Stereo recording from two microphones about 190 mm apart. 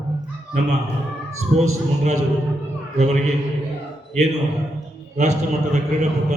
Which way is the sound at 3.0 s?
35° right (ahead or behind).